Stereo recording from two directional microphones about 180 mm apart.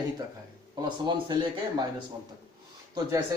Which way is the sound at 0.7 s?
25° right (ahead or behind).